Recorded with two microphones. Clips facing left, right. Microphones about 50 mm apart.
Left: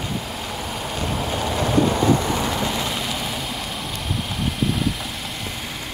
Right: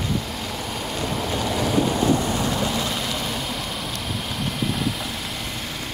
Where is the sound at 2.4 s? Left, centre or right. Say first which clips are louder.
Even; centre.